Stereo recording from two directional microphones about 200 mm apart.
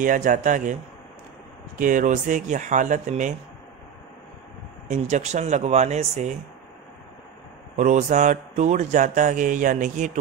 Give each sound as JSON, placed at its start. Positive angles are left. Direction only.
{"t": 0.0, "sound": "speech", "side_deg": -40}
{"t": 1.8, "sound": "speech", "side_deg": -40}
{"t": 4.8, "sound": "speech", "side_deg": -35}
{"t": 7.7, "sound": "speech", "side_deg": -35}